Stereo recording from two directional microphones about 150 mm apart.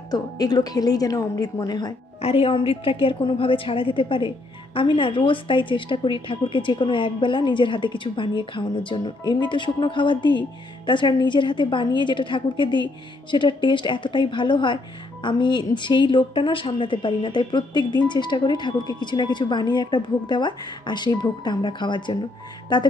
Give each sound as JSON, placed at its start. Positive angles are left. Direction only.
{"t": 0.1, "sound": "a woman's voice", "side_deg": 25}
{"t": 2.2, "sound": "a woman's voice", "side_deg": 40}